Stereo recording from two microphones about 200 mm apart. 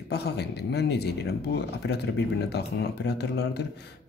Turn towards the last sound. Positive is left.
turn(degrees=55)  # may be behind; listen again after turning